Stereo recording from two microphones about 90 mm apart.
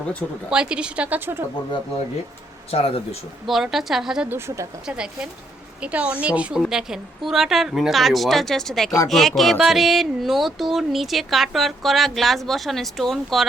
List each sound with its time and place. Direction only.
0.5 s a woman's voice: 10° right (ahead or behind)
2.6 s speech: 90° left
3.4 s speech: 5° right (ahead or behind)
4.3 s speech: 30° right (ahead or behind)
4.9 s a woman's voice: 10° right (ahead or behind)